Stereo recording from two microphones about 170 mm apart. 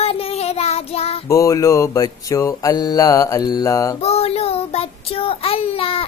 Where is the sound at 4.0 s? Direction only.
35° left (ahead or behind).